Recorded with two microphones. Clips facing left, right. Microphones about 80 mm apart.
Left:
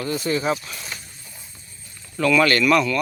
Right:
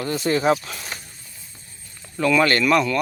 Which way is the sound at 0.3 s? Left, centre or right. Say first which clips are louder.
Right 5 dB; right.